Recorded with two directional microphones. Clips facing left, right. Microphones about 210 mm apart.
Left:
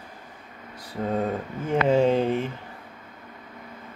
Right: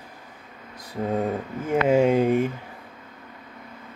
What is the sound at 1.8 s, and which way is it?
Speech, 10° right (ahead or behind).